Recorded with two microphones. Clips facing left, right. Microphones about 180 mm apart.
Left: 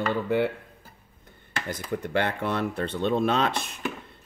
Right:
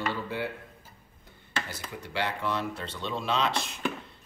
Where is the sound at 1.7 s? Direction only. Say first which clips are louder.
Left 10 dB; 55° left (ahead or behind).